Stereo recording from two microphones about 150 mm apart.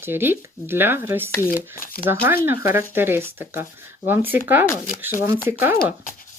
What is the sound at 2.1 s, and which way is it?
Speech, 15° right (ahead or behind).